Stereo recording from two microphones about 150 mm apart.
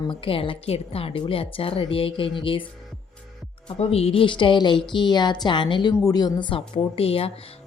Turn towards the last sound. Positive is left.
turn(degrees=40)  # may be behind; listen again after turning